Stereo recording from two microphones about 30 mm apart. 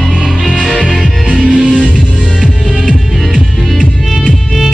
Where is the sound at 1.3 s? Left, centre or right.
Right.